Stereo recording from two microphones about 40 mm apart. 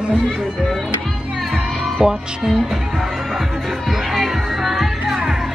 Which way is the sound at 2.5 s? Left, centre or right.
Centre.